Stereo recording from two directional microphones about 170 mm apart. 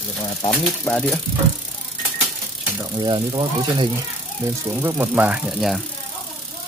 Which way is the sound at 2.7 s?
25° right (ahead or behind).